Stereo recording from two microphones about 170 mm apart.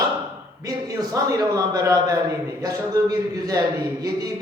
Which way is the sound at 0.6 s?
20° right (ahead or behind).